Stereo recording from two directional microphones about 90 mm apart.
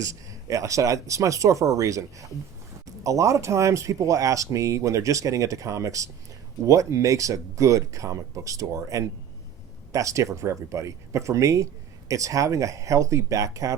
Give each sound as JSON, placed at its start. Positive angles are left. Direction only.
{"t": 0.0, "sound": "speech", "side_deg": -40}